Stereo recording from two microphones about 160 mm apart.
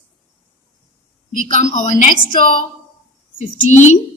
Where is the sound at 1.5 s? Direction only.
50° left (ahead or behind).